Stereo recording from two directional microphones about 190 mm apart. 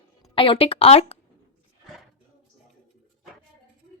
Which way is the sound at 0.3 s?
25° left (ahead or behind).